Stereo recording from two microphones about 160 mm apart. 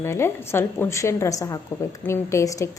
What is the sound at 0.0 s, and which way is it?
A woman's voice, 15° left (ahead or behind).